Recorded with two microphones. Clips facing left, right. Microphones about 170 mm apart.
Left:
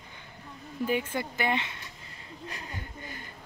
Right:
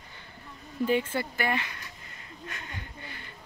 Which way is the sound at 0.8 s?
10° left (ahead or behind).